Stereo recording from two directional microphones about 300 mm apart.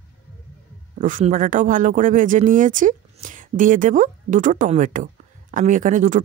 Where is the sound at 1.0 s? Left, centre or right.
Right.